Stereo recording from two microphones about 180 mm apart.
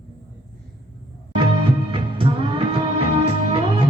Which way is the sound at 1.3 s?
30° right (ahead or behind).